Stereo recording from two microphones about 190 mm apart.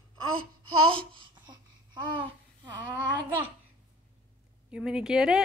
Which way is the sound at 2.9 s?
25° right (ahead or behind).